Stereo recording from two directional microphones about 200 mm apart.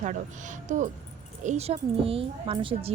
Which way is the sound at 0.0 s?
40° right (ahead or behind).